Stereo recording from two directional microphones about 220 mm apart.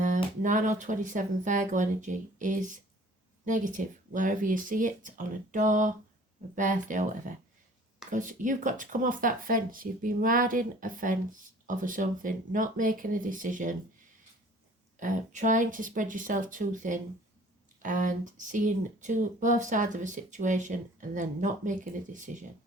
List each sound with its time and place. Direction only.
0.0 s speech: 35° right (ahead or behind)
14.9 s speech: 35° right (ahead or behind)